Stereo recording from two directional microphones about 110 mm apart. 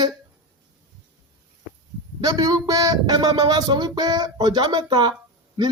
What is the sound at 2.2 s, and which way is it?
A man's voice, 40° right (ahead or behind).